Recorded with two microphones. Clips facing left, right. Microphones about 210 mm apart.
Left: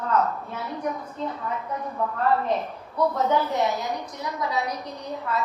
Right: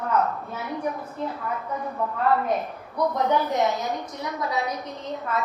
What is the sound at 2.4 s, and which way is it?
A woman's voice, 10° right (ahead or behind).